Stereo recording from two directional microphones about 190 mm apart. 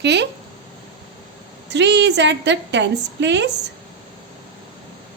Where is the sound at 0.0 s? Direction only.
65° right (ahead or behind).